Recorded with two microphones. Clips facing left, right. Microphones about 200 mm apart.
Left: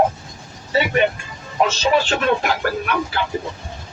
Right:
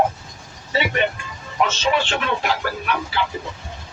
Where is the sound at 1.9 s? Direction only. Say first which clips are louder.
Left 5 dB; 40° left (ahead or behind).